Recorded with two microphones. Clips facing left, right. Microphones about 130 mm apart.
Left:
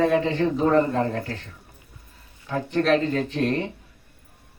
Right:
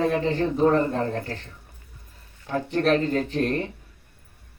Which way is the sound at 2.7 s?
40° right (ahead or behind).